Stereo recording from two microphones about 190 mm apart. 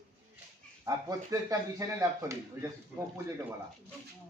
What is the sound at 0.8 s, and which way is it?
A man's voice, 15° right (ahead or behind).